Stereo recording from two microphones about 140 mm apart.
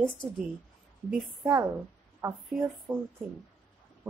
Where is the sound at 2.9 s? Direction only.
20° right (ahead or behind).